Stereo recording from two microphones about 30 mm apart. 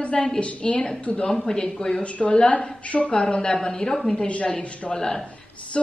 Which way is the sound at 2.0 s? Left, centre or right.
Left.